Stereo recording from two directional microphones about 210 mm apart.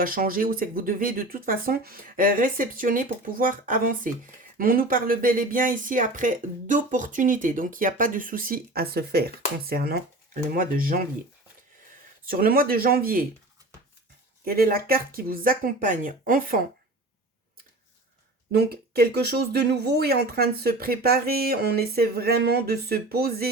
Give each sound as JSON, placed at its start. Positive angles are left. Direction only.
{"t": 0.0, "sound": "speech", "side_deg": -40}
{"t": 12.2, "sound": "speech", "side_deg": -45}
{"t": 14.4, "sound": "speech", "side_deg": -45}
{"t": 18.5, "sound": "speech", "side_deg": -50}